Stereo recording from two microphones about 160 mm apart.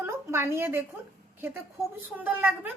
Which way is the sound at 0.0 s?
15° right (ahead or behind).